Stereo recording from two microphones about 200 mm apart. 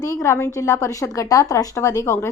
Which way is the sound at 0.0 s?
15° left (ahead or behind).